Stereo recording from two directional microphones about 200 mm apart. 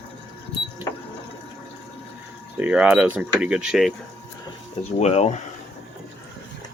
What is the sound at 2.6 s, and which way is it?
Speech, 5° right (ahead or behind).